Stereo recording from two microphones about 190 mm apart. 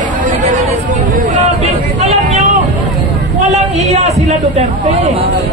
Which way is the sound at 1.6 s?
35° right (ahead or behind).